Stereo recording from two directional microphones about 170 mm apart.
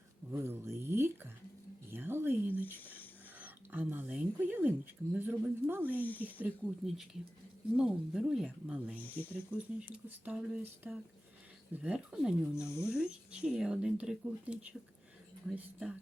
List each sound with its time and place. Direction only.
0.3 s speech: 15° right (ahead or behind)
2.8 s speech: 10° left (ahead or behind)
3.3 s speech: 10° right (ahead or behind)
6.0 s speech: 10° left (ahead or behind)
6.4 s speech: centre (ahead or behind)
9.0 s speech: 10° left (ahead or behind)
9.5 s speech: 5° right (ahead or behind)
12.5 s speech: 15° left (ahead or behind)
13.0 s speech: 5° right (ahead or behind)